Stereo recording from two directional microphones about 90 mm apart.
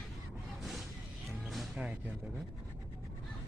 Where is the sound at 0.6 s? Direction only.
Centre (ahead or behind).